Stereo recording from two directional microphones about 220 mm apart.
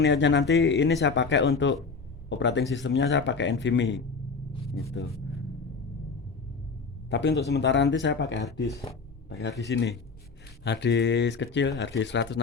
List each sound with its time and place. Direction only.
0.0 s speech: 55° left (ahead or behind)
7.1 s speech: 50° left (ahead or behind)